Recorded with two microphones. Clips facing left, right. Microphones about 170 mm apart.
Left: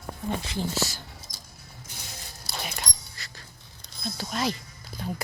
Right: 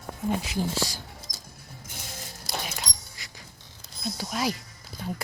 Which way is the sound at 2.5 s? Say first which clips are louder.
Right 4 dB; 90° right.